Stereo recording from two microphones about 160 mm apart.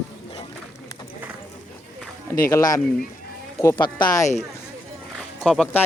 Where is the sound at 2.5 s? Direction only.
20° left (ahead or behind).